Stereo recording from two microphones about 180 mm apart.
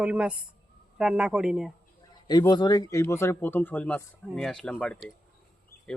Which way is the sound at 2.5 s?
25° left (ahead or behind).